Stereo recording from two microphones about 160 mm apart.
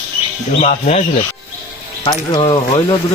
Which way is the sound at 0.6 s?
50° left (ahead or behind).